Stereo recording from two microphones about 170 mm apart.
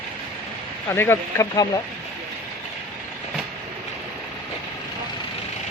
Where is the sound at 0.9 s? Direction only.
15° left (ahead or behind).